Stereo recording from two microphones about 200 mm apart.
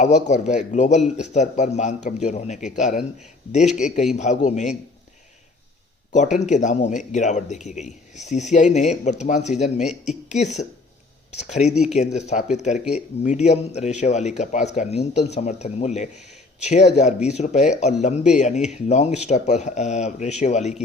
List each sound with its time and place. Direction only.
0.0 s speech: 35° left (ahead or behind)
6.1 s speech: 35° left (ahead or behind)